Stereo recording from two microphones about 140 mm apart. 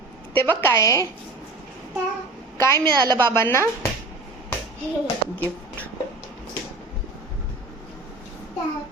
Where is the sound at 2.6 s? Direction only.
20° left (ahead or behind).